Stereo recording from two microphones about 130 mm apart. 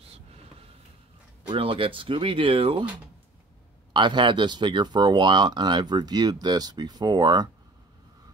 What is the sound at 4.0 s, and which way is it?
Speech, 35° right (ahead or behind).